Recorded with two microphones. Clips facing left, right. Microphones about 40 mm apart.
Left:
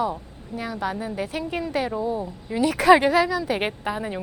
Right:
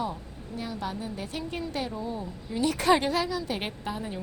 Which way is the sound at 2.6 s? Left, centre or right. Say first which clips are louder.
Left 7 dB; left.